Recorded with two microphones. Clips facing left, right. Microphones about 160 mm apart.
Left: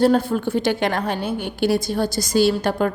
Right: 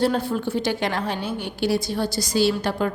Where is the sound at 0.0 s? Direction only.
50° left (ahead or behind).